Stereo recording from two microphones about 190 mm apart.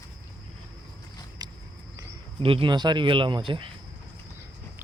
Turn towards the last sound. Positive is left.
turn(degrees=-25)  # may be behind; listen again after turning